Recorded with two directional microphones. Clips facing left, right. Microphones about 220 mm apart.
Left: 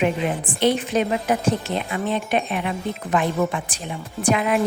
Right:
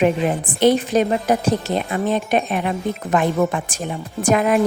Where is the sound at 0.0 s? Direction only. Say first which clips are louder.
Right 4 dB; 45° right (ahead or behind).